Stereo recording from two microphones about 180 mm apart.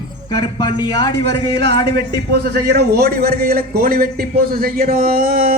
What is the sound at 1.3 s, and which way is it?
A man's voice, 70° right (ahead or behind).